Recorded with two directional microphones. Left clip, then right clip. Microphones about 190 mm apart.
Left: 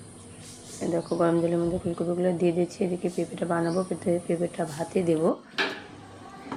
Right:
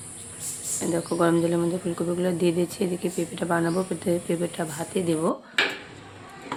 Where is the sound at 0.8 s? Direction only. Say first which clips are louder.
Right 1 dB; 15° right (ahead or behind).